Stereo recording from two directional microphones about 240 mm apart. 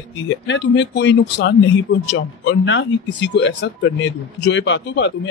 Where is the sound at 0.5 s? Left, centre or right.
Left.